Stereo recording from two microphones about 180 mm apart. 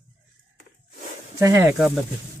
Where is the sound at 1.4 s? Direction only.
15° right (ahead or behind).